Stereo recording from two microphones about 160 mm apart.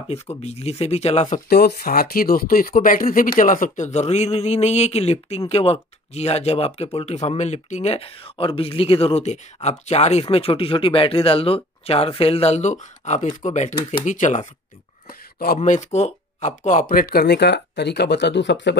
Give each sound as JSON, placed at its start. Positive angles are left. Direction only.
{"t": 0.1, "sound": "speech", "side_deg": 40}
{"t": 1.5, "sound": "speech", "side_deg": 85}
{"t": 15.0, "sound": "speech", "side_deg": 65}